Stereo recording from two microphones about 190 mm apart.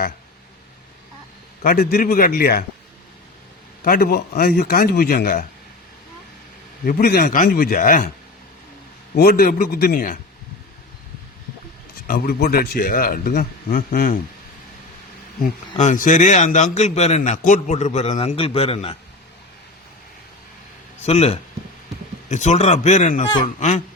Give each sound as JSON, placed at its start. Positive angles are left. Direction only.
{"t": 1.6, "sound": "speech", "side_deg": 50}
{"t": 3.8, "sound": "speech", "side_deg": 50}
{"t": 6.8, "sound": "speech", "side_deg": 50}
{"t": 9.1, "sound": "speech", "side_deg": 55}
{"t": 12.0, "sound": "speech", "side_deg": 50}
{"t": 15.8, "sound": "a man's voice", "side_deg": 40}
{"t": 21.0, "sound": "a man's voice", "side_deg": 30}